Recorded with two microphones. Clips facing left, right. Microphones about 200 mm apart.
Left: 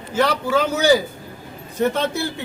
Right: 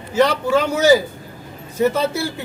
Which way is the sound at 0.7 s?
5° right (ahead or behind).